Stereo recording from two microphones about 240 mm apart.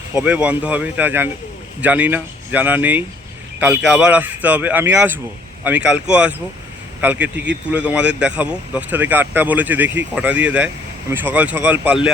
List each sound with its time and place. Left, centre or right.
0.1 s speech: centre